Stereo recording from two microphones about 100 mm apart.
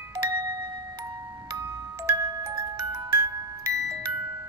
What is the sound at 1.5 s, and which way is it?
Glockenspiel, 35° right (ahead or behind).